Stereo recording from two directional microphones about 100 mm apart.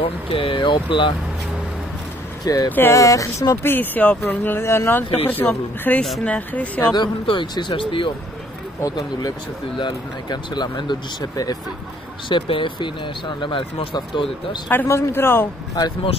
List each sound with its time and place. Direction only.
0.0 s speech: 60° left (ahead or behind)
2.4 s speech: 40° left (ahead or behind); by 6.9 s 15° left (ahead or behind)
6.9 s speech: 50° left (ahead or behind)
8.8 s speech: 40° left (ahead or behind)
12.3 s speech: 55° left (ahead or behind)
14.7 s speech: 25° left (ahead or behind)